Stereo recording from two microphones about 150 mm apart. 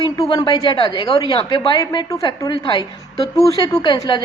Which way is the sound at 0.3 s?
30° left (ahead or behind).